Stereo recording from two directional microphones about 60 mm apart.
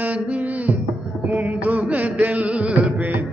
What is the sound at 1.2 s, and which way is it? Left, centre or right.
Music, right.